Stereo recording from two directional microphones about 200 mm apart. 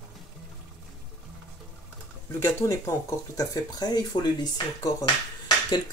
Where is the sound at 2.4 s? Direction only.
15° left (ahead or behind).